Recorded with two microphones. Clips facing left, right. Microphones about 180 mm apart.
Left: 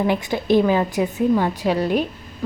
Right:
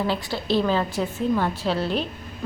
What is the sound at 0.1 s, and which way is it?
A woman's voice, 15° left (ahead or behind).